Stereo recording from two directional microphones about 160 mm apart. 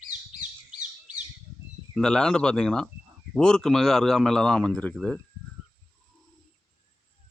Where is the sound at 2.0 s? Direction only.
5° left (ahead or behind).